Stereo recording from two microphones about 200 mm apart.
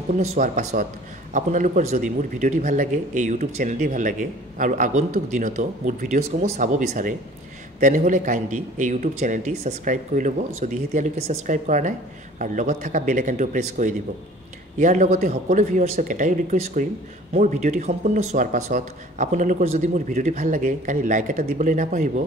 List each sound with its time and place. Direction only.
0.2 s speech: 35° right (ahead or behind)